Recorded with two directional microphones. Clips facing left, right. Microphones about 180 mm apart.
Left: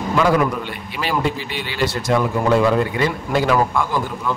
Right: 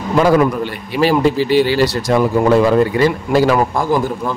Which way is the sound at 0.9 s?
40° right (ahead or behind).